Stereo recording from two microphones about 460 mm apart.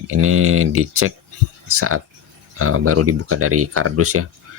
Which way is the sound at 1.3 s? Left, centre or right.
Right.